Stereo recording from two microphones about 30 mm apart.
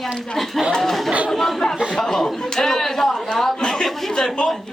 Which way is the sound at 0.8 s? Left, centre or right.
Centre.